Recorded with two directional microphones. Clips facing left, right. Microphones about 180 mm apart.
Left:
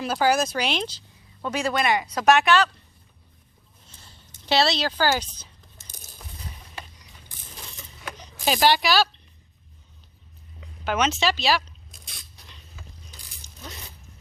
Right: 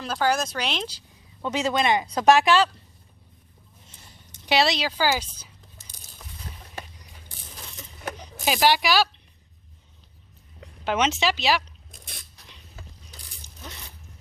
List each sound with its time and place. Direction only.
0.0 s speech: 10° left (ahead or behind)
0.9 s speech: 15° right (ahead or behind)
3.8 s a sound: 20° right (ahead or behind)
8.4 s speech: 10° right (ahead or behind)
10.8 s speech: 25° right (ahead or behind)